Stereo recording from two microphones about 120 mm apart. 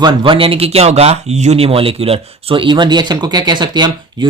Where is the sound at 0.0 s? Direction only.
40° right (ahead or behind).